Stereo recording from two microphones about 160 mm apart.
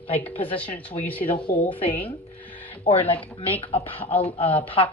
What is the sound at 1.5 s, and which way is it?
Speech, 35° left (ahead or behind).